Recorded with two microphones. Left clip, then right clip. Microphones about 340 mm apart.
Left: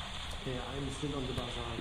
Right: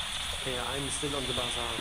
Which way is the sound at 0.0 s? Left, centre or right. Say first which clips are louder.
Right 8 dB; centre.